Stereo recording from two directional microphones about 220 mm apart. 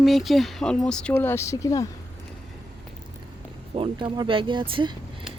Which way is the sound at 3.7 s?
25° right (ahead or behind).